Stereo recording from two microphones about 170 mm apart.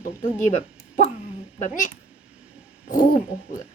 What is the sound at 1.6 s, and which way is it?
Speech, 50° left (ahead or behind).